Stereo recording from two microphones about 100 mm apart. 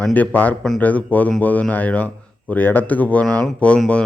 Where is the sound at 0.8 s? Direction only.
15° left (ahead or behind).